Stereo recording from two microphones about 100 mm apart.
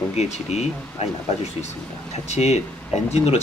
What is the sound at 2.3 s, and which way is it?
Speech, 90° left.